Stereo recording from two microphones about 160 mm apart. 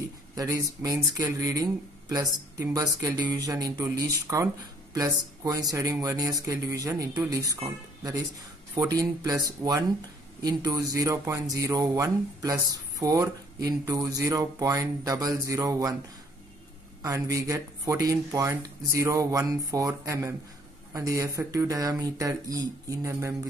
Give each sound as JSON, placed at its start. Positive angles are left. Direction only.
{"t": 0.4, "sound": "speech", "side_deg": -20}
{"t": 9.0, "sound": "speech", "side_deg": -20}
{"t": 17.0, "sound": "speech", "side_deg": -20}